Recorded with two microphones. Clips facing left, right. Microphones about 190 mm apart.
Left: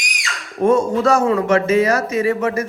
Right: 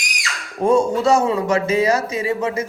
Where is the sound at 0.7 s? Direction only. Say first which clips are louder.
Even; 30° right (ahead or behind).